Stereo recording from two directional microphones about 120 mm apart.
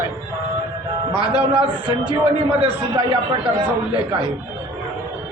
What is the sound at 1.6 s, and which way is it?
Speech, 35° left (ahead or behind).